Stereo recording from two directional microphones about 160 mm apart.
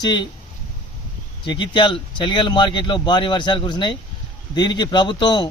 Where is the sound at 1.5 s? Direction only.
30° left (ahead or behind).